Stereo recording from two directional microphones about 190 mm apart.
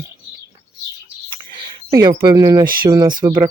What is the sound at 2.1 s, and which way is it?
Speech, 20° right (ahead or behind).